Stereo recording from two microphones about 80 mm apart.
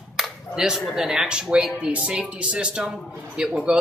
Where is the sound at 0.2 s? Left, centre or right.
Centre.